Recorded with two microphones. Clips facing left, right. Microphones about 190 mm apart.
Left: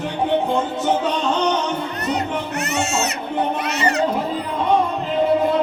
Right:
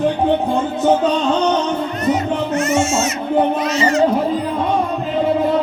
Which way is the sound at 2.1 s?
65° left (ahead or behind).